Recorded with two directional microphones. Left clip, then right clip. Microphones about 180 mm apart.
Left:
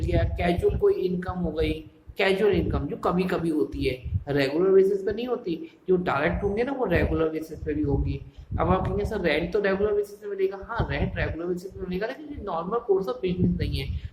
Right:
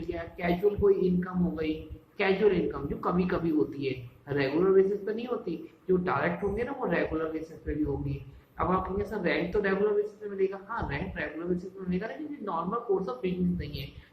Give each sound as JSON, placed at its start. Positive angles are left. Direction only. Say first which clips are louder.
{"t": 0.1, "sound": "a woman's voice", "louder": "left 6 dB", "side_deg": 40}